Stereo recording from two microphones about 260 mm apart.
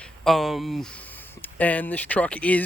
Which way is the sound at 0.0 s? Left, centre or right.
Centre.